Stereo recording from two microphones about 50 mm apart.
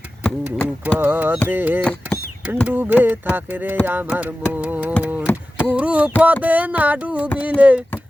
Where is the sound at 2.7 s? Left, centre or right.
Right.